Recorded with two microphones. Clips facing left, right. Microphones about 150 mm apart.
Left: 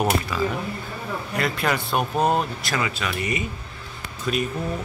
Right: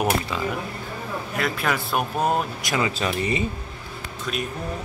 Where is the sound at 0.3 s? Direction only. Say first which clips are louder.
Left 3 dB; 25° right (ahead or behind).